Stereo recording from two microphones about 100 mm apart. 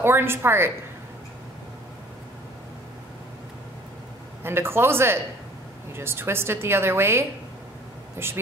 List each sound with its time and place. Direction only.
0.0 s a woman's voice: 25° right (ahead or behind)
4.4 s a woman's voice: 25° right (ahead or behind)